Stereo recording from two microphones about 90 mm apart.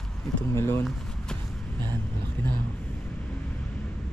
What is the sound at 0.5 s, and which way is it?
Speech, 25° left (ahead or behind).